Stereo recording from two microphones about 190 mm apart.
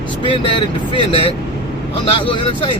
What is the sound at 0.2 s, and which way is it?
Speech, 25° left (ahead or behind).